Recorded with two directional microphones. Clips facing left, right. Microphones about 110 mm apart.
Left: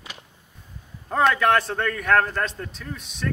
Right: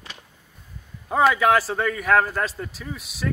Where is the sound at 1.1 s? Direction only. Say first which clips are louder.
Right 1 dB; 5° right (ahead or behind).